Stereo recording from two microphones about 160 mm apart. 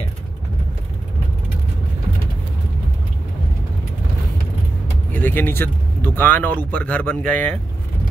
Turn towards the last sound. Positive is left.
turn(degrees=10)  # may be behind; listen again after turning